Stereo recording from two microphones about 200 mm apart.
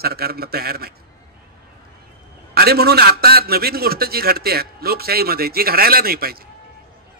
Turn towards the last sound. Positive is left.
turn(degrees=-50)  # may be behind; listen again after turning